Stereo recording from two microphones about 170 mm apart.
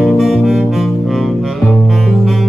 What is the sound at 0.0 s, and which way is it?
Music, centre (ahead or behind).